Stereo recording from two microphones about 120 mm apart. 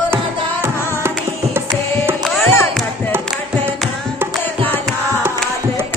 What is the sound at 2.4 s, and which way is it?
Music, 15° left (ahead or behind).